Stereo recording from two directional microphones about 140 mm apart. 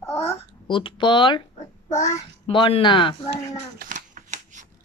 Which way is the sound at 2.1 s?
55° left (ahead or behind).